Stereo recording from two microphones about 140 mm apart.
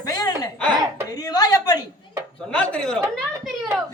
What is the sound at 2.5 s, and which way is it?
Speech, 5° left (ahead or behind).